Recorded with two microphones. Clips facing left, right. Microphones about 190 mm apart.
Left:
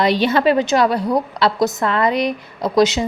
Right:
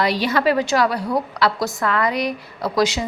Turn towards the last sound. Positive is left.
turn(degrees=20)  # may be behind; listen again after turning